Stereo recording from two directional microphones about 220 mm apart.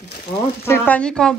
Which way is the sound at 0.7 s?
5° left (ahead or behind).